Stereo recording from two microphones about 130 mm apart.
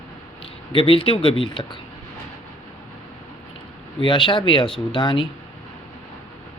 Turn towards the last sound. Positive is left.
turn(degrees=40)  # may be behind; listen again after turning